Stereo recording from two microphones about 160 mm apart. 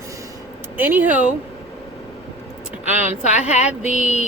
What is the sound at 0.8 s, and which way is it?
Speech, 10° right (ahead or behind).